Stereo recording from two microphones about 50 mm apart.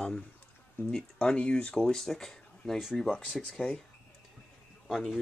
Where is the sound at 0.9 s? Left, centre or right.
Left.